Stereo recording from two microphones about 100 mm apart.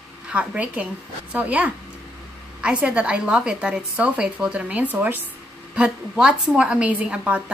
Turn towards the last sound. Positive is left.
turn(degrees=-10)  # may be behind; listen again after turning